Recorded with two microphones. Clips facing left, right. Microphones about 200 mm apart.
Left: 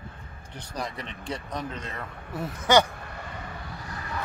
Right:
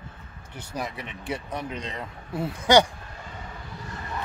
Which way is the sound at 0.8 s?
10° right (ahead or behind).